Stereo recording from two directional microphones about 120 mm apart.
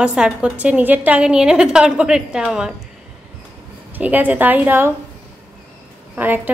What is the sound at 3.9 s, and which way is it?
Speech, 15° right (ahead or behind).